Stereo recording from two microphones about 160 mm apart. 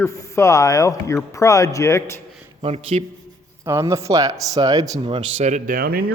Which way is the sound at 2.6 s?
40° right (ahead or behind).